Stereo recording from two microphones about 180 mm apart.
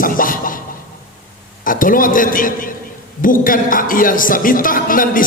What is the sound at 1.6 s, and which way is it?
A man's voice, 50° left (ahead or behind).